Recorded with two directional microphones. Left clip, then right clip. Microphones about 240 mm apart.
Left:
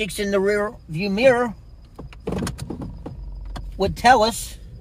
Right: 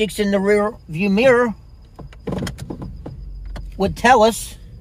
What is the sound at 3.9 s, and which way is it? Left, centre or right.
Speech, right.